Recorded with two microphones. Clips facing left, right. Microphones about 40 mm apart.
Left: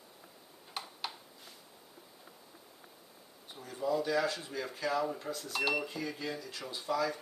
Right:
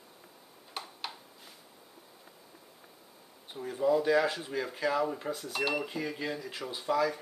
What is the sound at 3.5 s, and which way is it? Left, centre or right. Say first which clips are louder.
Speech: right 6 dB; right.